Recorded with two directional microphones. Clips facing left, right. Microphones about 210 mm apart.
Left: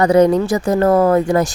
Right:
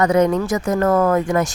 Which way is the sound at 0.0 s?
35° left (ahead or behind).